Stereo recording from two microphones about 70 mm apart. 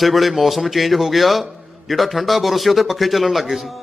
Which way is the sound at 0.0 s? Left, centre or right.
Centre.